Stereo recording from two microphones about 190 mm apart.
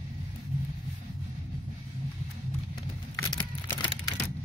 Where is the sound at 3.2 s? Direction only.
25° left (ahead or behind).